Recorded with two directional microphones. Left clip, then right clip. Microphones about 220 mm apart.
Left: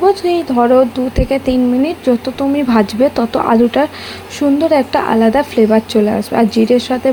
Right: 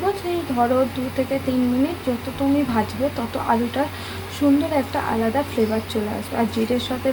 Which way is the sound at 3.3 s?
35° left (ahead or behind).